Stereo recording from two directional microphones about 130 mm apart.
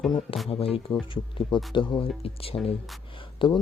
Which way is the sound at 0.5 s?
45° left (ahead or behind).